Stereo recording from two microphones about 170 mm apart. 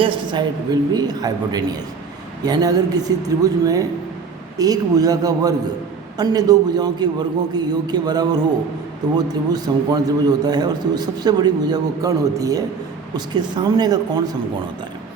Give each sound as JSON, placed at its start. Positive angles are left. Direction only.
{"t": 0.0, "sound": "a man's voice", "side_deg": -25}